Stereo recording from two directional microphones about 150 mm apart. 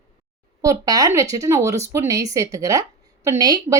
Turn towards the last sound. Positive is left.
turn(degrees=-25)  # may be behind; listen again after turning